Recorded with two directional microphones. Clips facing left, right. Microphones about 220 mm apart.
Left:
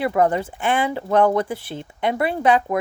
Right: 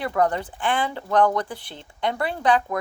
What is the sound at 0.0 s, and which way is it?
Speech, 20° left (ahead or behind).